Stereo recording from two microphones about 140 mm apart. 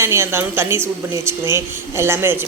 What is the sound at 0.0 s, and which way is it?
A woman's voice, 20° right (ahead or behind).